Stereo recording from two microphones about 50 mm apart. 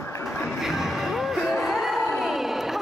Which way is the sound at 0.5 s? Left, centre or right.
Centre.